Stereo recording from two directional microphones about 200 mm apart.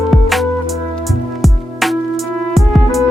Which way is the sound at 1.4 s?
Centre (ahead or behind).